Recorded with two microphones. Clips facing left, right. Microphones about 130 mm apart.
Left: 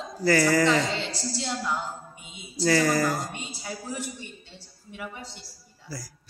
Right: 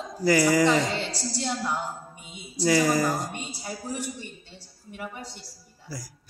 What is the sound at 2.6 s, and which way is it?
Speech, 15° right (ahead or behind).